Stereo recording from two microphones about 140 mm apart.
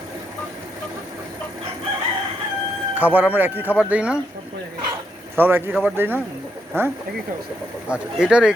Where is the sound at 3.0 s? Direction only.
10° right (ahead or behind).